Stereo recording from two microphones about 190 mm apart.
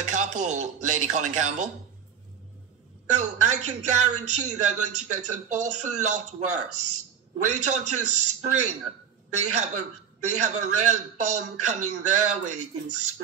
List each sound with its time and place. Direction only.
0.0 s a woman's voice: 40° right (ahead or behind)
3.1 s a woman's voice: 40° right (ahead or behind)